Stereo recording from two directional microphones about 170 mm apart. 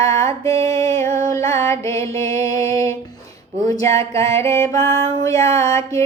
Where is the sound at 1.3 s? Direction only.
15° left (ahead or behind).